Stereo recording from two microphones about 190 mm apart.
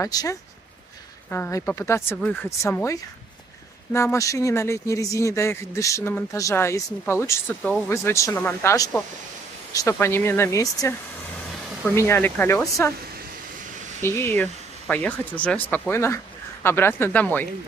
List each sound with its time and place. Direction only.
0.0 s speech: 20° left (ahead or behind)
14.0 s speech: 15° left (ahead or behind)